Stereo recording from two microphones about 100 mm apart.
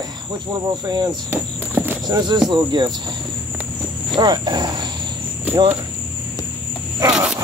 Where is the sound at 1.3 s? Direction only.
20° right (ahead or behind).